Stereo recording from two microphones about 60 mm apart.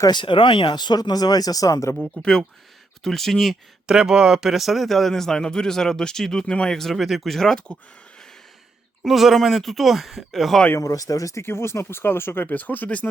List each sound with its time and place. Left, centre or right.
0.9 s speech: left
2.1 s a man's voice: centre
3.8 s a man's voice: centre
9.0 s a man's voice: centre
10.8 s speech: left
11.4 s speech: left